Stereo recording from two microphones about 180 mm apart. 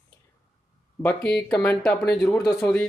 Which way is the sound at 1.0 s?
5° left (ahead or behind).